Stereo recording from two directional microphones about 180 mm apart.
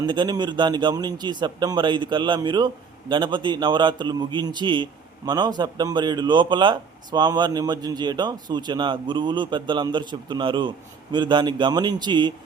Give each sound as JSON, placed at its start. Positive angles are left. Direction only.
{"t": 0.0, "sound": "a man's voice", "side_deg": -25}